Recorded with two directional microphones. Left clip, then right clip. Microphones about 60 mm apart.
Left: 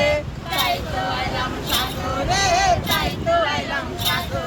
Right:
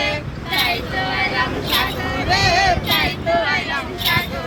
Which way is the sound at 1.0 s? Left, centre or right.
Right.